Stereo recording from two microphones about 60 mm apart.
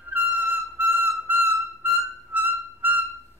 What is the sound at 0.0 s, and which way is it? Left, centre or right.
Music, right.